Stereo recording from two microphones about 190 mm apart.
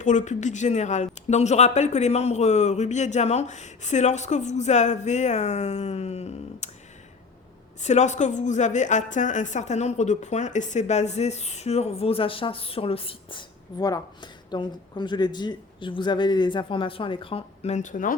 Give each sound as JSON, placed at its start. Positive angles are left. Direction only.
{"t": 0.0, "sound": "a woman's voice", "side_deg": 40}
{"t": 7.8, "sound": "a woman's voice", "side_deg": 40}